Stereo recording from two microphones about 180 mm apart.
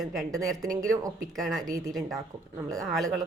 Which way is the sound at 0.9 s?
20° right (ahead or behind).